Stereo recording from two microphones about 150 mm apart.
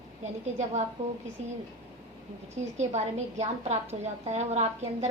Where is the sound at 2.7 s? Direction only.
50° right (ahead or behind).